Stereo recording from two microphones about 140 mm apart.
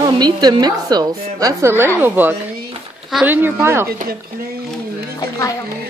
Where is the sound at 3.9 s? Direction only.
90° right.